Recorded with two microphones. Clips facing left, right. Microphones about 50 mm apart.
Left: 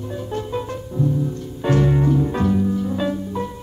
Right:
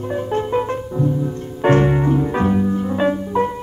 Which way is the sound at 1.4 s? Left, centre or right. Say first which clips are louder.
Right 6 dB; right.